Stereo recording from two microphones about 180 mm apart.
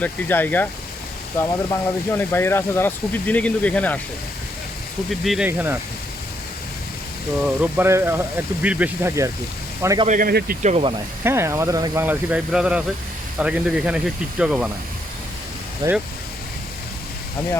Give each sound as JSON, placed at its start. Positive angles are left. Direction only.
{"t": 0.0, "sound": "speech", "side_deg": 10}
{"t": 5.2, "sound": "speech", "side_deg": 0}
{"t": 5.5, "sound": "speech", "side_deg": -10}
{"t": 7.6, "sound": "speech", "side_deg": -15}
{"t": 10.1, "sound": "speech", "side_deg": -55}
{"t": 11.2, "sound": "speech", "side_deg": -15}
{"t": 15.8, "sound": "speech", "side_deg": -20}